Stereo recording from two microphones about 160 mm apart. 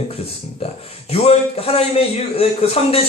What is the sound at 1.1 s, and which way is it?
A man's voice, 40° left (ahead or behind).